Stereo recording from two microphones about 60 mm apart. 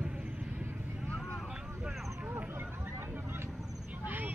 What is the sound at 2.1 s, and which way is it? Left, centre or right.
Vehicle, right.